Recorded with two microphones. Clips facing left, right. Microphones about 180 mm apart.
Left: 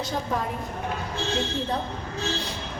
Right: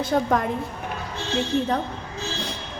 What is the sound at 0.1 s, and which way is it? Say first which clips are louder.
Speech: right 11 dB; 60° right (ahead or behind).